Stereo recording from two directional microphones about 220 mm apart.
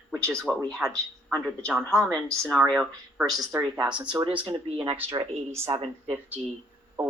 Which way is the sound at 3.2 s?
20° right (ahead or behind).